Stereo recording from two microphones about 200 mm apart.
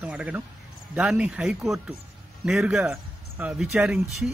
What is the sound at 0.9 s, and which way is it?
Speech, 5° right (ahead or behind).